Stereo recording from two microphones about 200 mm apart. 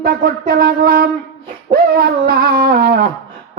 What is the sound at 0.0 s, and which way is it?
A man's voice, 50° right (ahead or behind).